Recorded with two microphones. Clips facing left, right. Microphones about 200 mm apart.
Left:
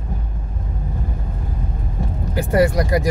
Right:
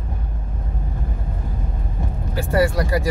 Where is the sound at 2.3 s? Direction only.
15° left (ahead or behind).